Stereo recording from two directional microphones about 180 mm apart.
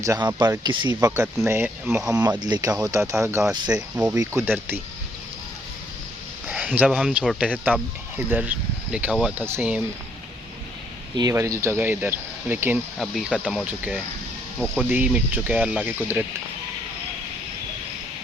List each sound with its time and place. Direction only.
0.0 s speech: 20° right (ahead or behind)
3.7 s speech: 5° right (ahead or behind)
4.1 s speech: 15° right (ahead or behind)
6.5 s speech: 5° right (ahead or behind)
11.2 s speech: 20° right (ahead or behind)